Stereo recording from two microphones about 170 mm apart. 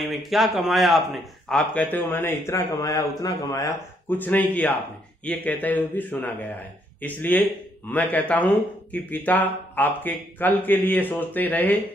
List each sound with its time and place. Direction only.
0.0 s speech: centre (ahead or behind)